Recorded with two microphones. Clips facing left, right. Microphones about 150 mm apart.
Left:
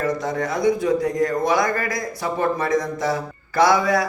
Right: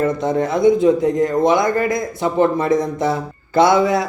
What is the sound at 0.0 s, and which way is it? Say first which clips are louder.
A man's voice: right 5 dB; 25° right (ahead or behind).